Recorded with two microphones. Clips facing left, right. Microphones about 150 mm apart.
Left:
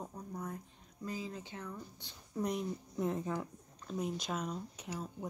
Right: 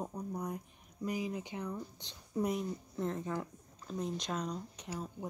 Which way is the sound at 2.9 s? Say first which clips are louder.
Left 1 dB; 10° left (ahead or behind).